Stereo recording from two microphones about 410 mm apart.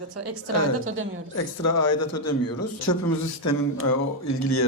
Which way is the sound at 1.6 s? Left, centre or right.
Left.